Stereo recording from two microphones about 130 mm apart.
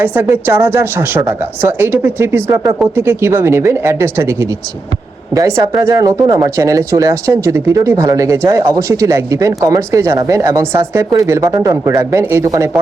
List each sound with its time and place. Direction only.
0.0 s a woman's voice: 20° right (ahead or behind)